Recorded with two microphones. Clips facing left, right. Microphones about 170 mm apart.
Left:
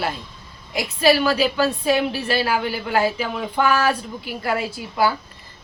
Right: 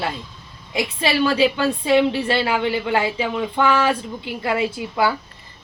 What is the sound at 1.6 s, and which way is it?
A woman's voice, 25° right (ahead or behind).